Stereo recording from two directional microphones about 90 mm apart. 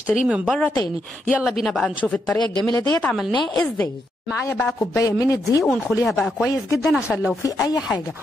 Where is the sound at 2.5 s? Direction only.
50° left (ahead or behind).